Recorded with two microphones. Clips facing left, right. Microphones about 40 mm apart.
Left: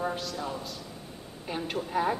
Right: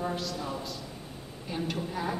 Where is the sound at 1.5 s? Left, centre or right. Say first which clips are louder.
Left 1 dB; centre.